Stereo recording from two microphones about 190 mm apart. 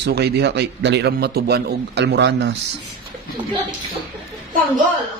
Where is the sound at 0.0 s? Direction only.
60° right (ahead or behind).